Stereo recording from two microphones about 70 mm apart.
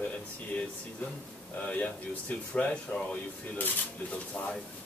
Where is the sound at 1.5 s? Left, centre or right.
Centre.